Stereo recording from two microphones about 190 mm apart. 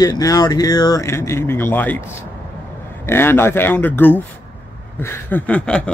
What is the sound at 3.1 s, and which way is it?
Speech, 10° left (ahead or behind).